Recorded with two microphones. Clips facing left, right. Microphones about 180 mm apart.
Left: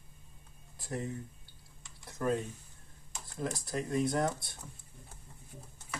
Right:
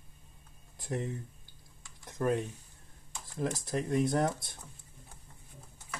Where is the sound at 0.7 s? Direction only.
20° right (ahead or behind).